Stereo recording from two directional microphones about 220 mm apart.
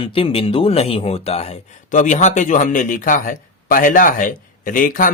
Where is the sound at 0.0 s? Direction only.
25° left (ahead or behind).